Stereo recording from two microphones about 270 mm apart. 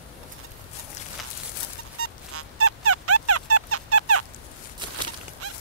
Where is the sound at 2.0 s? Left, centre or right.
Right.